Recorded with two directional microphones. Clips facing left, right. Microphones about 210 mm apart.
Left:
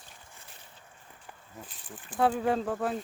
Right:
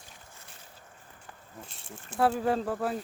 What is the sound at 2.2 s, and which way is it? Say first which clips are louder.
Speech: even; centre (ahead or behind).